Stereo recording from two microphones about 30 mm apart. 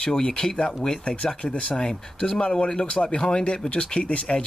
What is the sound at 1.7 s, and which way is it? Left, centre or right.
Speech, left.